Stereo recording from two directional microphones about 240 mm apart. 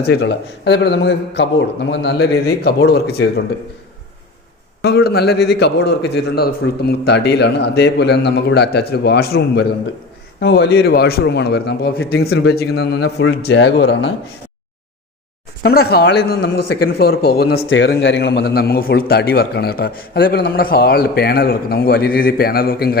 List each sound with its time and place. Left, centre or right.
0.0 s a man's voice: left
4.8 s a man's voice: left
15.6 s a man's voice: left